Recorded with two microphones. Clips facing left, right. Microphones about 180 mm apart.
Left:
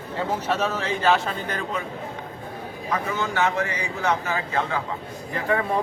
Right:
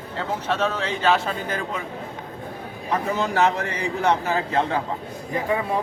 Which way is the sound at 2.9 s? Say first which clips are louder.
Right 3 dB; 35° right (ahead or behind).